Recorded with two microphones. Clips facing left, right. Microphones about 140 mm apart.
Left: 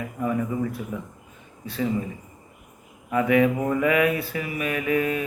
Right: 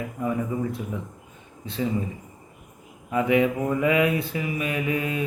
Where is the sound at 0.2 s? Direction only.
20° right (ahead or behind).